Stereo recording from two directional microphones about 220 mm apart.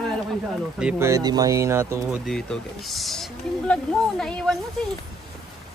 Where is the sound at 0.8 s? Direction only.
10° right (ahead or behind).